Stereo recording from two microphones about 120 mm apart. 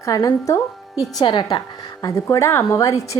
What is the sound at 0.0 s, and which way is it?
Speech, 25° left (ahead or behind).